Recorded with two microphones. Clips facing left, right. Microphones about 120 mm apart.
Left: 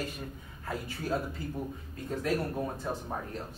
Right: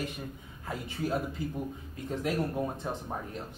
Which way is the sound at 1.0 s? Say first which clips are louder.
Right 1 dB; 15° right (ahead or behind).